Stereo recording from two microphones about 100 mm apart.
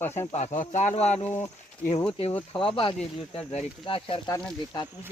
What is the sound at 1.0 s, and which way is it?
Speech, 90° left.